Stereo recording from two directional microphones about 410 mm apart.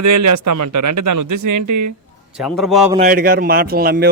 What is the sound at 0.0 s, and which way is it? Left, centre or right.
A man's voice, right.